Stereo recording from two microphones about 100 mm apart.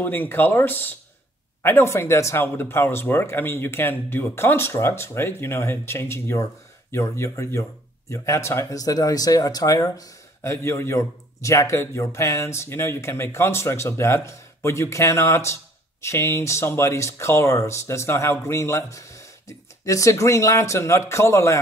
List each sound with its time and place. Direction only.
0.0 s speech: 20° left (ahead or behind)